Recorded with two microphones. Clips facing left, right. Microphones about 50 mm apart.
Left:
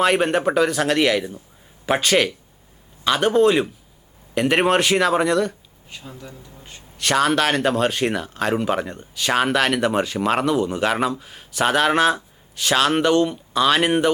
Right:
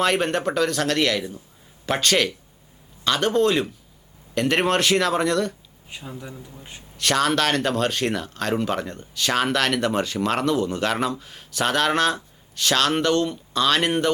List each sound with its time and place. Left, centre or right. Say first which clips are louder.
0.0 s speech: left 3 dB; centre
5.9 s a man's voice: right 2 dB; centre
6.9 s speech: left 2 dB; centre